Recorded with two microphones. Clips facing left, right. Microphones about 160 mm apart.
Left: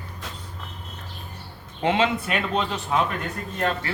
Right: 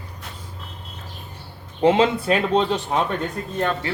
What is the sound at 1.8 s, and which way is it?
Speech, 35° right (ahead or behind).